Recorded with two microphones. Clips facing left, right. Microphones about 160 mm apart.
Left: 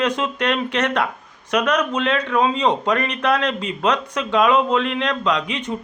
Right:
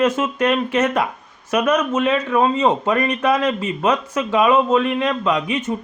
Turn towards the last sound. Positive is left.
turn(degrees=-5)  # may be behind; listen again after turning